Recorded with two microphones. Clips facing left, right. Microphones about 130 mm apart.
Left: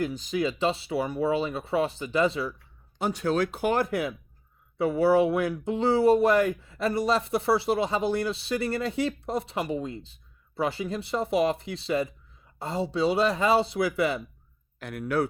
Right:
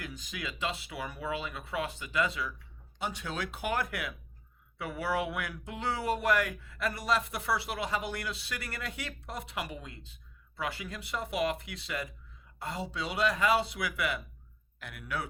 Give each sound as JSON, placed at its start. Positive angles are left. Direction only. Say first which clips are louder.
{"t": 0.0, "sound": "speech", "louder": "left 14 dB", "side_deg": 30}
{"t": 14.8, "sound": "speech", "louder": "left 11 dB", "side_deg": 40}